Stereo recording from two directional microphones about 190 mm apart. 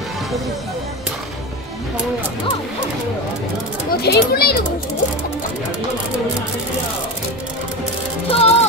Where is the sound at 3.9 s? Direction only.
55° left (ahead or behind).